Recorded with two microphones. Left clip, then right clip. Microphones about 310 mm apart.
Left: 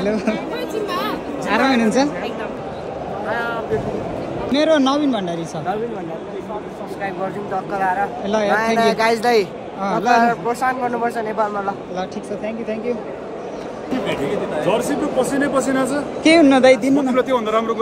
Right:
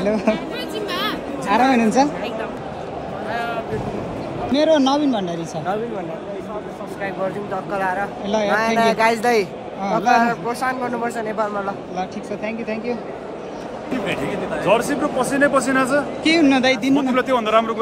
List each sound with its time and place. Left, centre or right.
0.0 s speech: centre
0.9 s a sound: centre
3.3 s a sound: centre
4.5 s speech: centre
7.5 s speech: centre
13.9 s speech: centre